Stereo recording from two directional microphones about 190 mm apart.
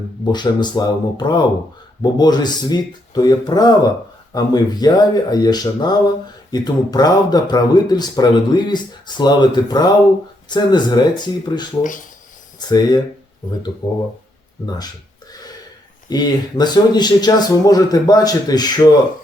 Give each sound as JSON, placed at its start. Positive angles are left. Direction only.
{"t": 0.3, "sound": "speech", "side_deg": 25}
{"t": 16.0, "sound": "speech", "side_deg": 20}